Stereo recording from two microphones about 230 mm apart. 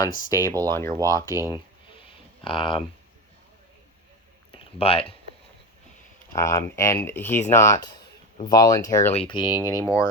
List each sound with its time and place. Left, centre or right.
0.3 s speech: centre
4.5 s speech: left
6.3 s speech: centre